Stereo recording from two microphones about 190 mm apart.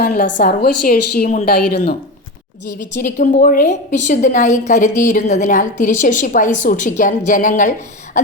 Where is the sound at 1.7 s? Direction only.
60° left (ahead or behind).